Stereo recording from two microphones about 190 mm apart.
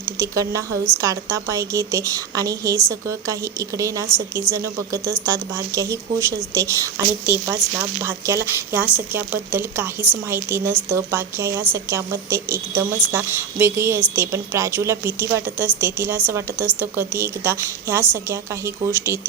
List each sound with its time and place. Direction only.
0.2 s speech: 15° right (ahead or behind)